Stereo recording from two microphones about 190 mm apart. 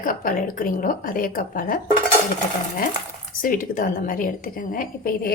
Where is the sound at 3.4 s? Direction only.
45° left (ahead or behind).